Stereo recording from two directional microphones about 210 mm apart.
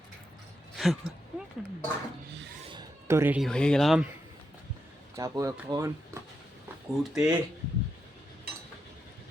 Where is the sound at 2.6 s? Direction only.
20° right (ahead or behind).